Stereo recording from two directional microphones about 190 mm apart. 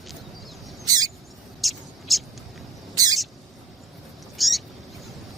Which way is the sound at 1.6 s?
Centre (ahead or behind).